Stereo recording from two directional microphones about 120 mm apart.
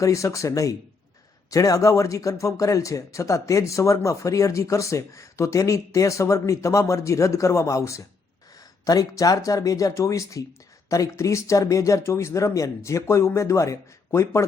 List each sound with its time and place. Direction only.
0.0 s speech: 25° left (ahead or behind)